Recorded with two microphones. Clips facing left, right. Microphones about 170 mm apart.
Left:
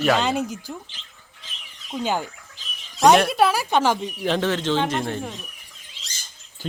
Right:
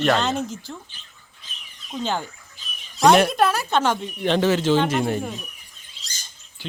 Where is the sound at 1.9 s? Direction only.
10° left (ahead or behind); by 5.4 s 10° right (ahead or behind).